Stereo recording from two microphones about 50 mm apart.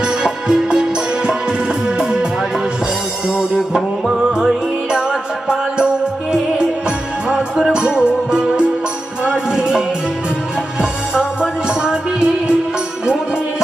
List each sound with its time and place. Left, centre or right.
0.2 s music: centre
2.0 s music: centre
3.2 s music: centre
7.3 s music: centre